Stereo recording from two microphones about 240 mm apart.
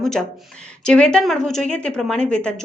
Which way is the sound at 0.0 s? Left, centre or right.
Centre.